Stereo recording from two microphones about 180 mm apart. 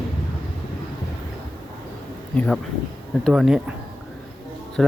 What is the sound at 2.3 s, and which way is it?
Speech, 5° left (ahead or behind).